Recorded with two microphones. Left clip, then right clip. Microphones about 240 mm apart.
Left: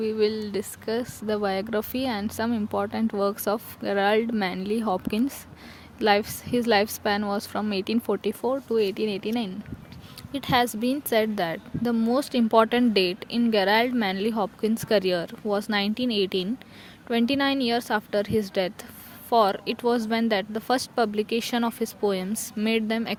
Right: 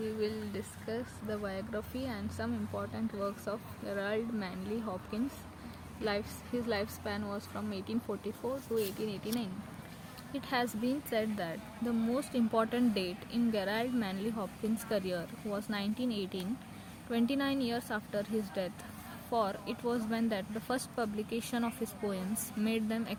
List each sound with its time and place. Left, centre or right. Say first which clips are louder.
0.0 s speech: left 12 dB; left